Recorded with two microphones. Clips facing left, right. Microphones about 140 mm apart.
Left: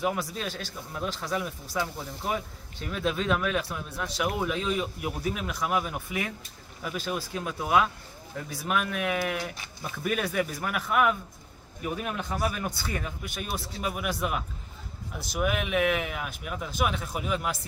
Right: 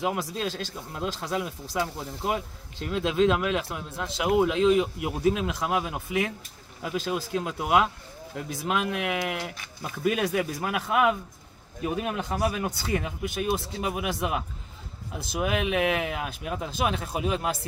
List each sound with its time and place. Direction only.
0.0 s speech: 20° right (ahead or behind)